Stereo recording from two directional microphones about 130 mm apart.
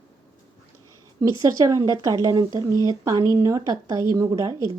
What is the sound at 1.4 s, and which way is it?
Speech, 25° right (ahead or behind).